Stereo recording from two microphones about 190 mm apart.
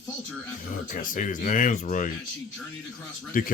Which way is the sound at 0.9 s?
45° left (ahead or behind).